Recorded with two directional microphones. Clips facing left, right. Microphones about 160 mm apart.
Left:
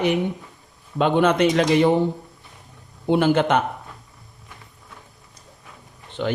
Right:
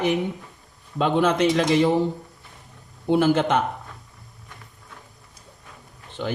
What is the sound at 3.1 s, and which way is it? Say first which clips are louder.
Speech: left 1 dB; 65° left (ahead or behind).